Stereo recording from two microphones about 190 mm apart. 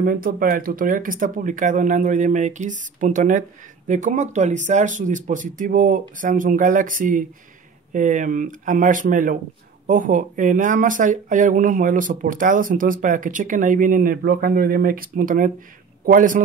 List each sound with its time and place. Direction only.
0.0 s speech: 50° right (ahead or behind)